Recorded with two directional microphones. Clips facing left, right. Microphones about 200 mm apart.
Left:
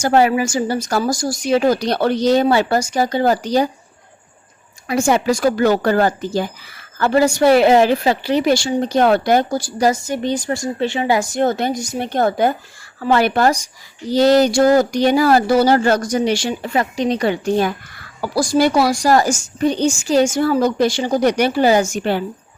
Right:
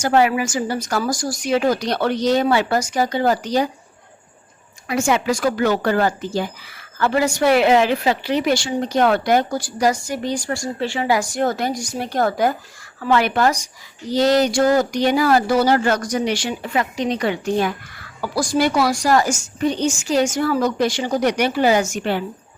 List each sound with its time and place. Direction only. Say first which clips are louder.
0.0 s a woman's voice: left 2 dB; 35° left (ahead or behind)
4.9 s a woman's voice: left 3 dB; 35° left (ahead or behind)